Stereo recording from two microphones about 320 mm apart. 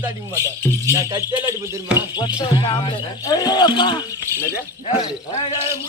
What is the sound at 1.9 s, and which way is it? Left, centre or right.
Speech, centre.